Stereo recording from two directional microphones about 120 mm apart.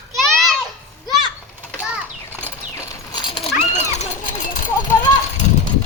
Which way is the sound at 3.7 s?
75° left (ahead or behind).